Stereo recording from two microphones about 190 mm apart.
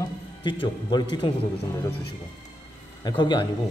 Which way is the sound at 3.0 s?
25° left (ahead or behind).